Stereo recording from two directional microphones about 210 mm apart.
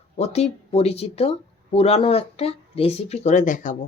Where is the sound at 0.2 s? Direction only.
30° left (ahead or behind).